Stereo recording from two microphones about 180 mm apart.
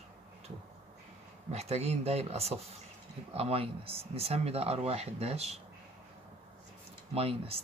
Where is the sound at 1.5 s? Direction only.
35° right (ahead or behind).